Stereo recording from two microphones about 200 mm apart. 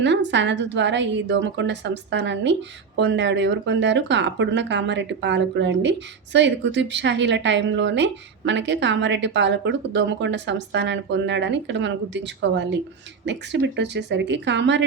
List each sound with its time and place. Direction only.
0.0 s a woman's voice: 60° right (ahead or behind)